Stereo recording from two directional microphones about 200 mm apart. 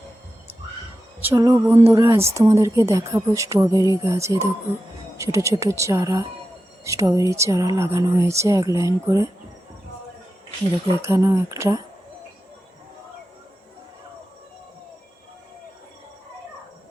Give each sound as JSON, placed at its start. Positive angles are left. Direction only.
{"t": 1.2, "sound": "speech", "side_deg": -15}
{"t": 11.0, "sound": "speech", "side_deg": -15}